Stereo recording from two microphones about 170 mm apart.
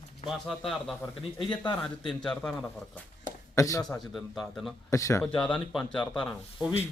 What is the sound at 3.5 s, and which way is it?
Speech, 20° left (ahead or behind).